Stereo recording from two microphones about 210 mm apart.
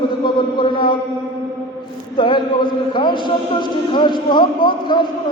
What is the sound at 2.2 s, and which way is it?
Speech, 20° left (ahead or behind).